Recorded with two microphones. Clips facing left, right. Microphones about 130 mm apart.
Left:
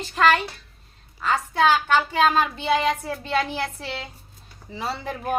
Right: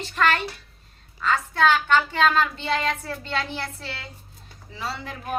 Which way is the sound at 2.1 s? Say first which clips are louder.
Left 1 dB; 10° left (ahead or behind).